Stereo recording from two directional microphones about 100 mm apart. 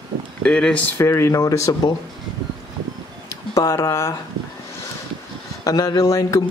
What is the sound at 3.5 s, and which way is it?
Speech, 35° left (ahead or behind).